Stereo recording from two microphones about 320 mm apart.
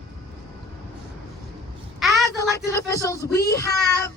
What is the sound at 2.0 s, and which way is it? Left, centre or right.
Speech, centre.